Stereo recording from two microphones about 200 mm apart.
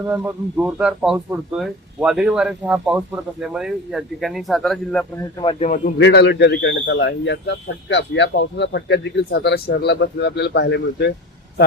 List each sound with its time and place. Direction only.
0.0 s speech: 5° right (ahead or behind)
5.4 s a man's voice: 30° left (ahead or behind)
6.0 s a man's voice: 60° left (ahead or behind)